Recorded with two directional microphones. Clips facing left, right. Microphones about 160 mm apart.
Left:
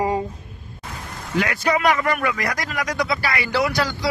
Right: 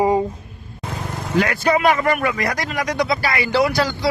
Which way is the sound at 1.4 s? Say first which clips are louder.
Right 2 dB; 30° right (ahead or behind).